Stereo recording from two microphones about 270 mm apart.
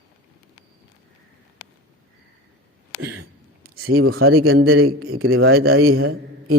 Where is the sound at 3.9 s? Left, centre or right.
Right.